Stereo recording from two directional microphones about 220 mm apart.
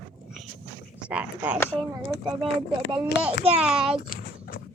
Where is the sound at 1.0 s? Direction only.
5° right (ahead or behind).